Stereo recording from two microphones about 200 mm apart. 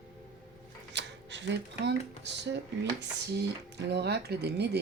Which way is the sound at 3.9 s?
55° right (ahead or behind).